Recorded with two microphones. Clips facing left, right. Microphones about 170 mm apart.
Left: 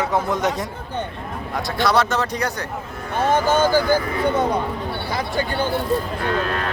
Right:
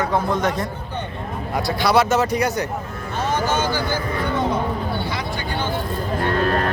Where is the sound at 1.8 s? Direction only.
5° right (ahead or behind).